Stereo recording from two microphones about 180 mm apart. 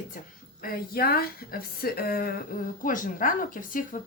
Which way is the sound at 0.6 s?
55° left (ahead or behind).